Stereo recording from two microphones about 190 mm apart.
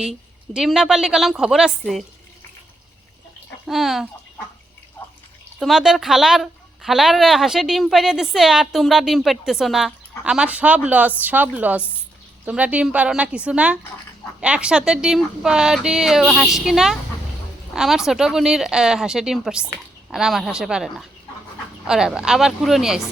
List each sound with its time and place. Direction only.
0.0 s a woman's voice: centre (ahead or behind)
3.7 s speech: centre (ahead or behind)
5.5 s a woman's voice: centre (ahead or behind)